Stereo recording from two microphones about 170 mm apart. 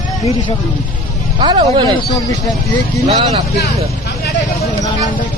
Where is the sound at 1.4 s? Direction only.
25° right (ahead or behind).